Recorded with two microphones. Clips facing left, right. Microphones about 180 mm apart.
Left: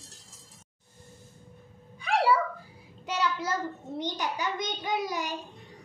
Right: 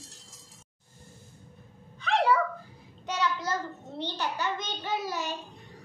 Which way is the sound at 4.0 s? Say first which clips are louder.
Even; 15° left (ahead or behind).